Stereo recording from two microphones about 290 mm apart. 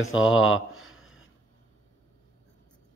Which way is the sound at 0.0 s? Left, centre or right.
Centre.